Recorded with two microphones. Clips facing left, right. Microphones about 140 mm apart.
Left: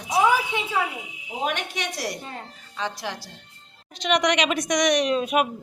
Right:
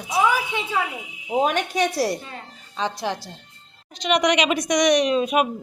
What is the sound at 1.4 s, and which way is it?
A woman's voice, 35° right (ahead or behind).